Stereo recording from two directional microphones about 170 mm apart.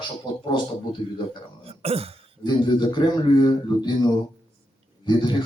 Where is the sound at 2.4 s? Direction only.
25° left (ahead or behind).